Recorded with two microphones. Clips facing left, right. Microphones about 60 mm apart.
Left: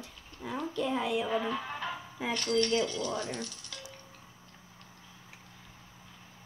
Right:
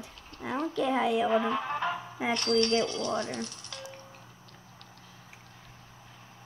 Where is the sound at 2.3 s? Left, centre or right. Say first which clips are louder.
Right 3 dB; right.